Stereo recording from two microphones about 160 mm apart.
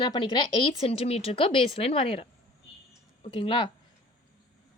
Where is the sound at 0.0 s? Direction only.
30° left (ahead or behind).